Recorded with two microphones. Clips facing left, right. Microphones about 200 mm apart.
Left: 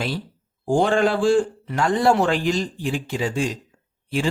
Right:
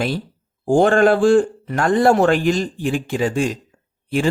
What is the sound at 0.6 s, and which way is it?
Speech, 50° right (ahead or behind).